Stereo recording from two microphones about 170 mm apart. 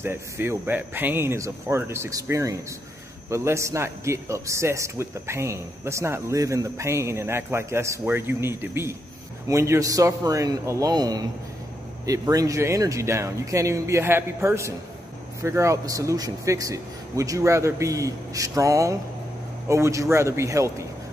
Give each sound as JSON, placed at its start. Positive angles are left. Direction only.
{"t": 0.0, "sound": "a man's voice", "side_deg": -15}